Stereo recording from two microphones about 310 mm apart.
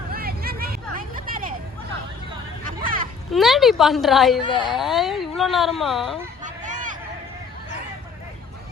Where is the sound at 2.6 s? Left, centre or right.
Right.